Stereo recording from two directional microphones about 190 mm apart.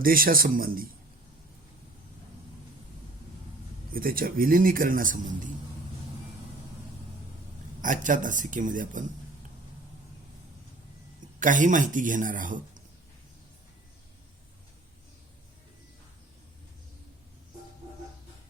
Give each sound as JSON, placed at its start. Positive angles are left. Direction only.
{"t": 0.0, "sound": "a man's voice", "side_deg": -50}
{"t": 3.9, "sound": "a man's voice", "side_deg": -50}
{"t": 7.8, "sound": "a man's voice", "side_deg": -45}
{"t": 11.3, "sound": "a man's voice", "side_deg": -45}